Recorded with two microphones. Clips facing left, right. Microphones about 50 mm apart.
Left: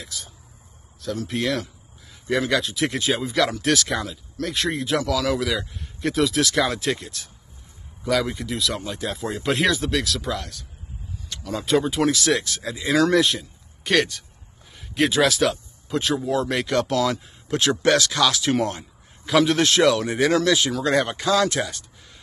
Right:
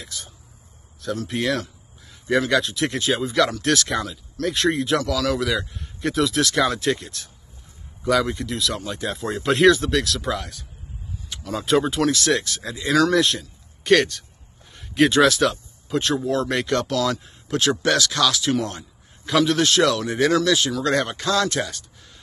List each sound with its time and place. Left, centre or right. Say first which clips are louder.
0.0 s speech: even; centre
16.8 s speech: left 1 dB; centre